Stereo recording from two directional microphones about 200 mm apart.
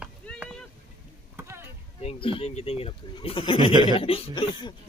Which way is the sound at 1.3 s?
10° right (ahead or behind).